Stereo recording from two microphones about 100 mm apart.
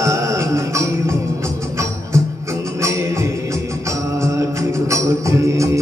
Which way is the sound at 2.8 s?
30° right (ahead or behind).